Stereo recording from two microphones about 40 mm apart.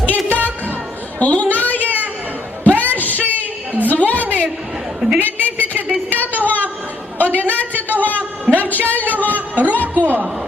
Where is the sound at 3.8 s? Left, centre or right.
Left.